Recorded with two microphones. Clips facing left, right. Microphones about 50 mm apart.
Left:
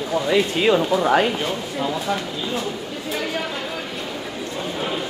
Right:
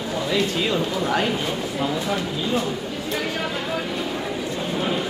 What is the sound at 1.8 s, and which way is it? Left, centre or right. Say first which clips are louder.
Speech: left 1 dB; centre.